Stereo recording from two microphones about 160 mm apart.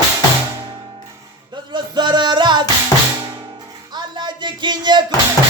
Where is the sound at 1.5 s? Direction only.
30° right (ahead or behind).